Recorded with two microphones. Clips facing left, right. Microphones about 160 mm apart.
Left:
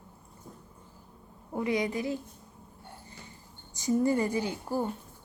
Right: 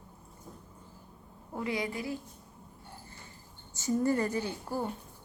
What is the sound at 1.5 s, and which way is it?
Speech, 20° left (ahead or behind).